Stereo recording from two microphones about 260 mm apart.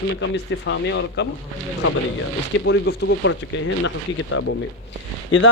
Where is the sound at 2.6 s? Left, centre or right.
Left.